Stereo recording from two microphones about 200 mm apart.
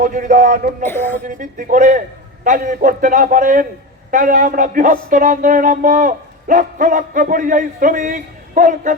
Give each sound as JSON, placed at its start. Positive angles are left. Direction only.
{"t": 0.0, "sound": "a man's voice", "side_deg": -40}
{"t": 0.9, "sound": "a woman's voice", "side_deg": 10}
{"t": 1.3, "sound": "a man's voice", "side_deg": -40}